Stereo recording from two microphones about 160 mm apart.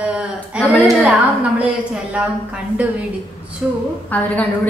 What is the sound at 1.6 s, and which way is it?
Speech, 5° right (ahead or behind).